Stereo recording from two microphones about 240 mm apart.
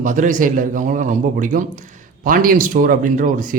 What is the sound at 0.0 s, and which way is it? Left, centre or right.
A man's voice, right.